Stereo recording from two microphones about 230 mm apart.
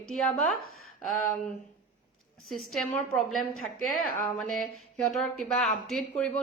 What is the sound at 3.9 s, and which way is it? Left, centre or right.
Speech, right.